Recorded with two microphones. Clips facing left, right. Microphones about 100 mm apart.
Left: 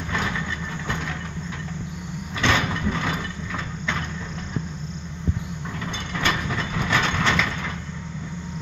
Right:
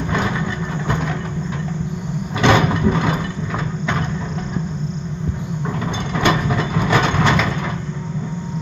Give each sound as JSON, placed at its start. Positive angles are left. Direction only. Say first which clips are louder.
{"t": 0.8, "sound": "vehicle", "louder": "right 7 dB", "side_deg": -50}
{"t": 2.4, "sound": "vehicle", "louder": "right 8 dB", "side_deg": -60}
{"t": 2.8, "sound": "a sound", "louder": "right 8 dB", "side_deg": -55}
{"t": 6.2, "sound": "train", "louder": "right 8 dB", "side_deg": -55}
{"t": 6.9, "sound": "vehicle", "louder": "right 6 dB", "side_deg": -55}